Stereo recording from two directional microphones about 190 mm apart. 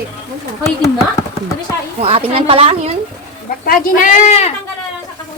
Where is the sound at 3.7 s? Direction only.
45° left (ahead or behind).